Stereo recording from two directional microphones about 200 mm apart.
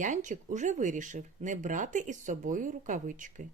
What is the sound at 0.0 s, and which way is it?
Speech, 40° right (ahead or behind).